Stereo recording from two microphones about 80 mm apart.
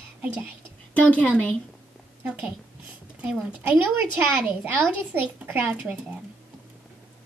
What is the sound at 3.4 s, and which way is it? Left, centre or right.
A woman's voice, centre.